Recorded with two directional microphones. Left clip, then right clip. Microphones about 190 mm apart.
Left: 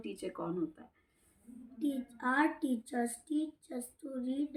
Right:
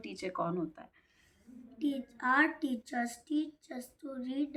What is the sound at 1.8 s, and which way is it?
A woman's voice, 5° right (ahead or behind).